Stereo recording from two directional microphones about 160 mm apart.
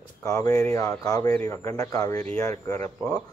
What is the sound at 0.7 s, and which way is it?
Speech, 20° left (ahead or behind).